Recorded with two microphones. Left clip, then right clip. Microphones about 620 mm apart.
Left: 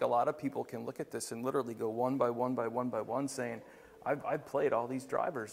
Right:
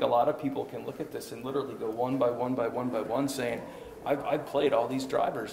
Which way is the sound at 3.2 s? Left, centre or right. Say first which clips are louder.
Right 6 dB; left.